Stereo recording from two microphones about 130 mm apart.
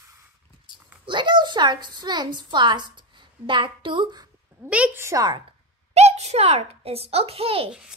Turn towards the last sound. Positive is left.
turn(degrees=-45)  # may be behind; listen again after turning